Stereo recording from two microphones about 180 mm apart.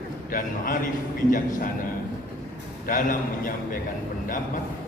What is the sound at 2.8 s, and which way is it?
Speech, 50° left (ahead or behind).